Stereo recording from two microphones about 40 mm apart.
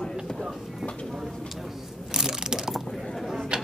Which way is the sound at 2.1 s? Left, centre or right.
Centre.